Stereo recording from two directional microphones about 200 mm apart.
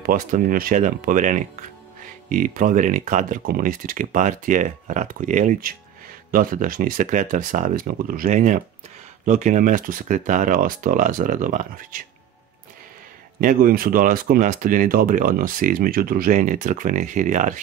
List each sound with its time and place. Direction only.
0.0 s speech: 45° right (ahead or behind)
13.4 s speech: 45° right (ahead or behind)